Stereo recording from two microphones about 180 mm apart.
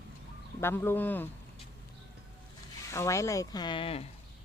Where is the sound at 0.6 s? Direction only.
15° left (ahead or behind).